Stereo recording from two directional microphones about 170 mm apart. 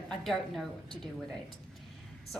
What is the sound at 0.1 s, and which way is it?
Speech, centre (ahead or behind).